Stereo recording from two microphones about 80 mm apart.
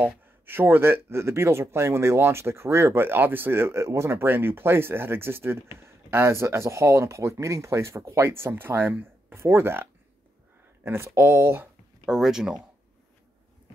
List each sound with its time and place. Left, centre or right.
0.0 s speech: right
12.1 s speech: centre